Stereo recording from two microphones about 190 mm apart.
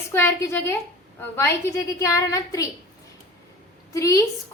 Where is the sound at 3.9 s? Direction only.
15° left (ahead or behind).